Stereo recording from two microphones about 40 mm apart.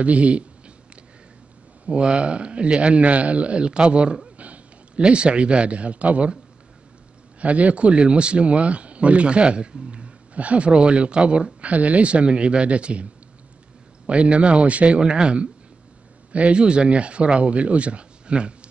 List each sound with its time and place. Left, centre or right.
0.0 s a man's voice: right
1.9 s a man's voice: right
7.3 s a man's voice: right
15.0 s a man's voice: right